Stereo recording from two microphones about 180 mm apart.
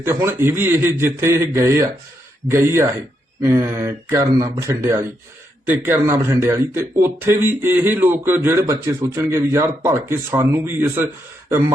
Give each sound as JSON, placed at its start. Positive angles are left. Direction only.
{"t": 0.0, "sound": "a man's voice", "side_deg": -15}